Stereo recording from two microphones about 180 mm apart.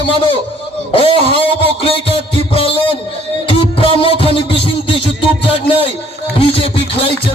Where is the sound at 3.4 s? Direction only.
30° left (ahead or behind).